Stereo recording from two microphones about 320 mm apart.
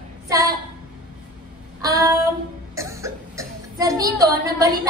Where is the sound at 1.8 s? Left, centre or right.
Centre.